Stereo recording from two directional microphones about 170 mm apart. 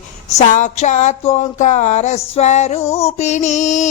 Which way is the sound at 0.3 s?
50° left (ahead or behind).